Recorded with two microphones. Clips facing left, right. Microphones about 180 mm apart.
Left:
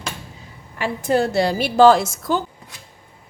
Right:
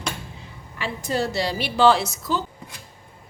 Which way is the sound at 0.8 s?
55° left (ahead or behind).